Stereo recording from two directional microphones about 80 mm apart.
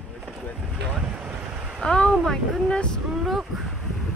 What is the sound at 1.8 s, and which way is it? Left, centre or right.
Speech, centre.